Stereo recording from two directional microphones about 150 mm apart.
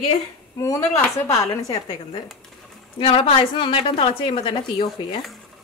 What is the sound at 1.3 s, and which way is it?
A woman's voice, 25° left (ahead or behind).